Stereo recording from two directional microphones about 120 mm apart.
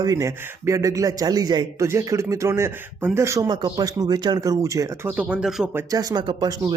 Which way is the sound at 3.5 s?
35° right (ahead or behind).